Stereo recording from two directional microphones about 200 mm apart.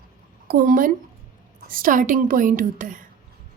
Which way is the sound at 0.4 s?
45° right (ahead or behind).